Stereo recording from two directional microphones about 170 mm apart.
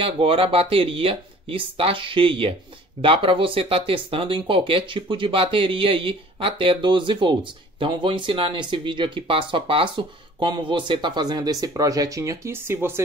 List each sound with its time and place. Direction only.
0.0 s speech: 30° right (ahead or behind); by 13.0 s 15° right (ahead or behind)